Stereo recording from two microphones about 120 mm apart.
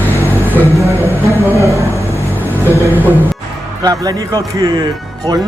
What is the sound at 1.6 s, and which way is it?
Speech, 25° right (ahead or behind).